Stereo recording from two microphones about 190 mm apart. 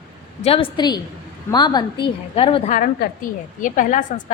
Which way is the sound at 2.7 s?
50° left (ahead or behind).